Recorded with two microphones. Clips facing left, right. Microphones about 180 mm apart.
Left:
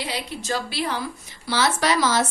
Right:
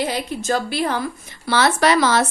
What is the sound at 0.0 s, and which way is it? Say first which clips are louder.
A woman's voice: right 7 dB; 50° right (ahead or behind).